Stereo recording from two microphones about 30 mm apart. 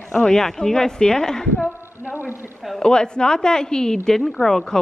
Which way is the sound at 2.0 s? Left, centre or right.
Centre.